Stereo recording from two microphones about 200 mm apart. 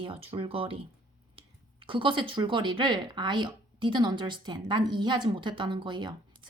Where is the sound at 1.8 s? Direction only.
25° right (ahead or behind).